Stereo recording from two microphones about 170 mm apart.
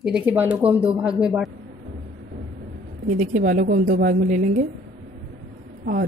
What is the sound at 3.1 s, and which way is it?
A woman's voice, 45° right (ahead or behind).